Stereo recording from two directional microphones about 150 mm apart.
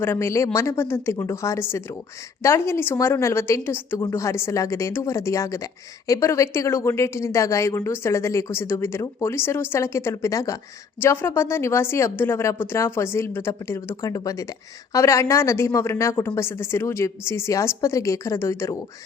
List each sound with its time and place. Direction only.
0.0 s a woman's voice: 15° left (ahead or behind)